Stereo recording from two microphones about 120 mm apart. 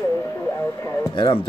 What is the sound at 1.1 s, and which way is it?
Speech, 45° left (ahead or behind).